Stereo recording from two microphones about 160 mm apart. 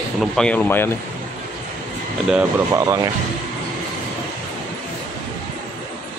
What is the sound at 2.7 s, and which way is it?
Speech, 20° right (ahead or behind).